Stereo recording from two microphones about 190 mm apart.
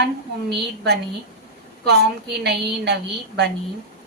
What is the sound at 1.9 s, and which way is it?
A woman's voice, 60° right (ahead or behind).